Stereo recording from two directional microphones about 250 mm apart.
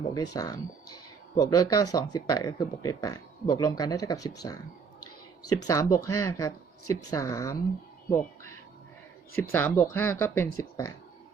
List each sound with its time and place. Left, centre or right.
0.1 s speech: centre
5.6 s speech: centre